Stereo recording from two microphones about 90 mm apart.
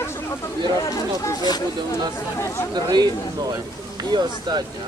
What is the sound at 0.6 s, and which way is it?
Speech, 45° left (ahead or behind).